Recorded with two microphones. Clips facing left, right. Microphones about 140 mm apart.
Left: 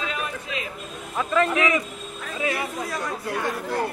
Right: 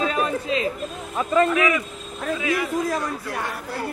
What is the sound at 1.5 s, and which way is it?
A man's voice, 30° left (ahead or behind).